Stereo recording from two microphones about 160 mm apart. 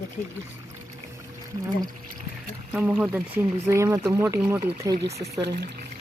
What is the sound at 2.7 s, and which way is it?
Speech, 10° right (ahead or behind).